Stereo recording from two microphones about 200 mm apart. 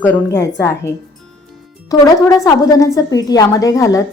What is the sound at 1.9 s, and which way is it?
A woman's voice, 15° left (ahead or behind).